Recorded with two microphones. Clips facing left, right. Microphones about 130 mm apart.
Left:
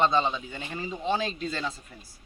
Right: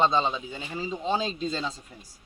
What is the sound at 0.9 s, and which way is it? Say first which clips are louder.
Speech: even; 20° right (ahead or behind).